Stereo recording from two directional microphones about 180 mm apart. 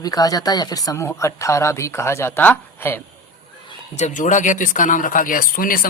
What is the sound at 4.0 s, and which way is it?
Speech, 45° left (ahead or behind).